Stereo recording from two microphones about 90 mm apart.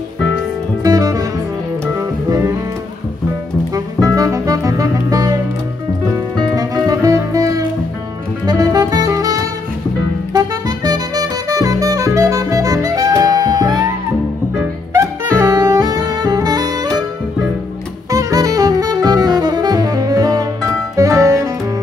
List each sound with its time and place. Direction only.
0.8 s music: 45° right (ahead or behind)
3.7 s music: 40° right (ahead or behind)
8.5 s saxophone: 45° right (ahead or behind)
10.3 s music: 45° right (ahead or behind)
15.0 s saxophone: 40° right (ahead or behind)
18.1 s saxophone: 40° right (ahead or behind)
20.9 s music: 40° right (ahead or behind)